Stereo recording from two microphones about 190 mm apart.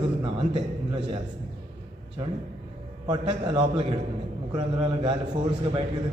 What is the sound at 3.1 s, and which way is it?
A man's voice, 25° right (ahead or behind).